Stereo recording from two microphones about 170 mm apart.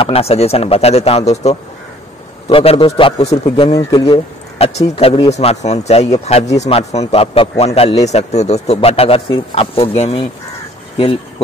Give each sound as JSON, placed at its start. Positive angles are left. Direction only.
{"t": 0.0, "sound": "speech", "side_deg": 35}
{"t": 3.7, "sound": "speech", "side_deg": 20}
{"t": 4.6, "sound": "speech", "side_deg": 35}